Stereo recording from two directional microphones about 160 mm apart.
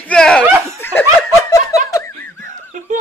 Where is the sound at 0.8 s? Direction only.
15° left (ahead or behind).